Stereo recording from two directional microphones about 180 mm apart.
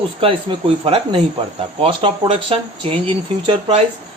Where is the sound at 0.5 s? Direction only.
25° right (ahead or behind).